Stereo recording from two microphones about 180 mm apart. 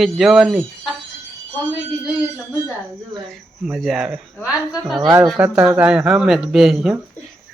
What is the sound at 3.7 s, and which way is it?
Speech, centre (ahead or behind).